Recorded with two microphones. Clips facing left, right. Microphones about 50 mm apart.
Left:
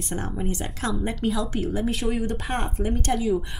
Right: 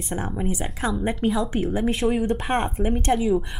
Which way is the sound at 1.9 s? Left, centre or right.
Centre.